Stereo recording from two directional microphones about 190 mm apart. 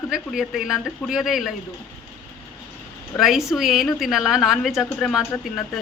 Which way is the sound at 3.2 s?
Centre (ahead or behind).